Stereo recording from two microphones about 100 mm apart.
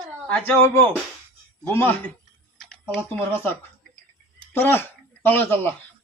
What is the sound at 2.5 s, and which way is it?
Typing, 10° left (ahead or behind).